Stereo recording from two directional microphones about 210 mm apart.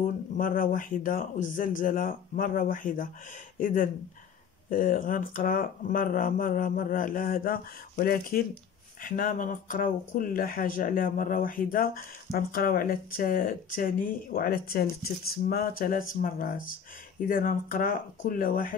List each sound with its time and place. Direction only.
0.4 s speech: 40° left (ahead or behind)